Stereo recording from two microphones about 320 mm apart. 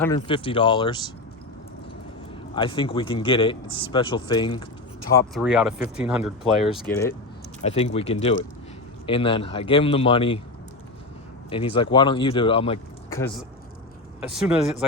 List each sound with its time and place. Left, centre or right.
0.0 s speech: centre
2.6 s speech: centre
5.1 s speech: centre
7.6 s speech: centre
11.4 s speech: centre
14.2 s speech: centre